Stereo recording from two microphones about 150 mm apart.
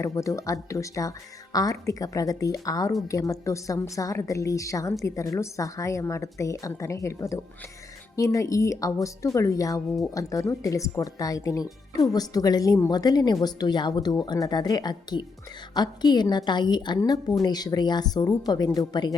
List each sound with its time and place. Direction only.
0.0 s a woman's voice: 20° left (ahead or behind)